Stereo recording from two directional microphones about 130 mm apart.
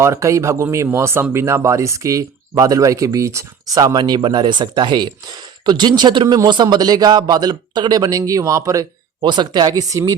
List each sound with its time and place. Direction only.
0.0 s a man's voice: 20° right (ahead or behind)